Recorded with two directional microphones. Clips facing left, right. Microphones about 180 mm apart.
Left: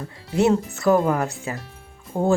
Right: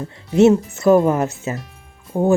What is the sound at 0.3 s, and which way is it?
Speech, 20° right (ahead or behind).